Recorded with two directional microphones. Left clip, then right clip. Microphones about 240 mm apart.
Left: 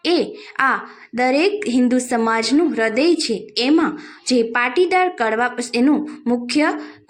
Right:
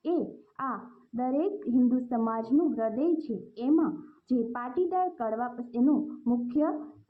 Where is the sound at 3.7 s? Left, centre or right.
Left.